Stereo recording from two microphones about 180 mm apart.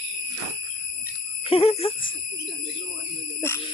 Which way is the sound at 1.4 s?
30° left (ahead or behind).